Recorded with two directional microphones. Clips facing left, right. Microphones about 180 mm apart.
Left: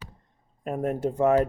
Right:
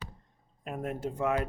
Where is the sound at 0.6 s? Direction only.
45° left (ahead or behind).